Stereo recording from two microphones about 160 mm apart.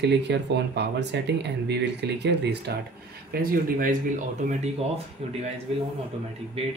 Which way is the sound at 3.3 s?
65° right (ahead or behind).